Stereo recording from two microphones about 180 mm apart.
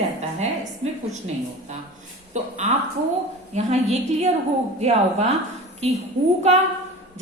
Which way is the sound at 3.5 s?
35° right (ahead or behind).